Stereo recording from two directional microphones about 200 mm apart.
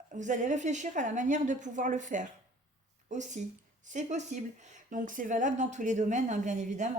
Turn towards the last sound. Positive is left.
turn(degrees=-35)  # may be behind; listen again after turning